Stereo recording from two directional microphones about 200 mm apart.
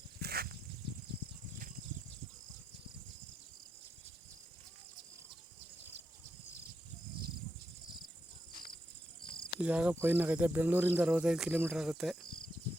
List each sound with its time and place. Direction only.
0.2 s dog: 50° right (ahead or behind)
9.2 s cricket: 25° left (ahead or behind)
9.6 s speech: 5° right (ahead or behind)